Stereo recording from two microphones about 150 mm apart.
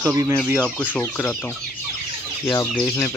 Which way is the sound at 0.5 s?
5° left (ahead or behind).